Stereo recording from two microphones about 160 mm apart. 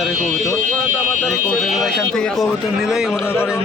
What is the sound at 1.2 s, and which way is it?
Speech, 5° left (ahead or behind).